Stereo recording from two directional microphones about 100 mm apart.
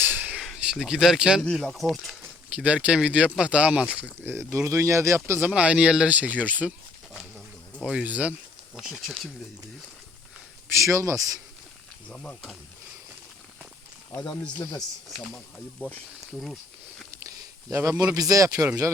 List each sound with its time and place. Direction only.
0.0 s a sound: 20° right (ahead or behind)
1.5 s speech: centre (ahead or behind)
2.2 s speech: 15° right (ahead or behind)
5.5 s speech: 10° right (ahead or behind)
7.3 s insect: centre (ahead or behind)
7.9 s speech: 15° right (ahead or behind)
10.8 s speech: 30° right (ahead or behind)
12.0 s speech: 10° left (ahead or behind)
14.2 s speech: 10° left (ahead or behind)
14.8 s speech: centre (ahead or behind)
17.7 s speech: 30° right (ahead or behind)